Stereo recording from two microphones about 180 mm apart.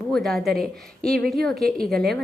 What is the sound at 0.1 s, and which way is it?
A woman's voice, centre (ahead or behind).